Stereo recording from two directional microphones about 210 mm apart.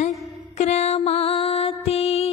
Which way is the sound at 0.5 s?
30° left (ahead or behind).